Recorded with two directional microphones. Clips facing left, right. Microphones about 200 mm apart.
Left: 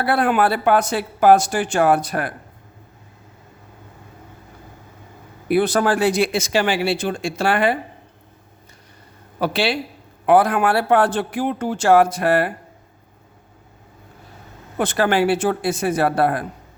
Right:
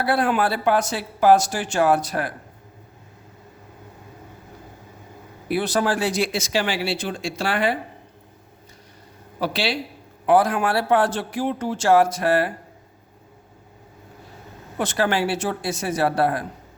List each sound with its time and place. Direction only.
0.0 s a man's voice: 55° left (ahead or behind)
5.5 s speech: 55° left (ahead or behind)
9.4 s a man's voice: 55° left (ahead or behind)
14.8 s a man's voice: 55° left (ahead or behind)